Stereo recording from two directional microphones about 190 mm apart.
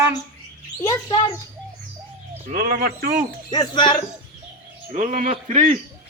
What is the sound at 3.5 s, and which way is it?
Speech, 20° left (ahead or behind).